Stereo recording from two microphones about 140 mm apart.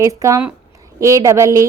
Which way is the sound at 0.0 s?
25° right (ahead or behind).